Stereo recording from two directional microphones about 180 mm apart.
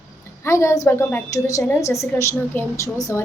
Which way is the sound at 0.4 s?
15° left (ahead or behind).